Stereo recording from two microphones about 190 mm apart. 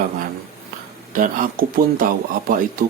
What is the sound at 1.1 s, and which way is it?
Speech, 45° right (ahead or behind).